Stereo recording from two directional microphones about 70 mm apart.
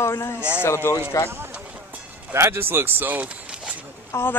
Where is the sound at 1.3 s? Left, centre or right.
Right.